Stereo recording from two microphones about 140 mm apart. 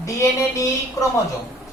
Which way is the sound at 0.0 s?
20° left (ahead or behind).